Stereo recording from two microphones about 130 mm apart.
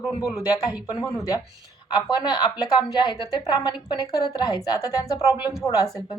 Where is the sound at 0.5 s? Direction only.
30° left (ahead or behind).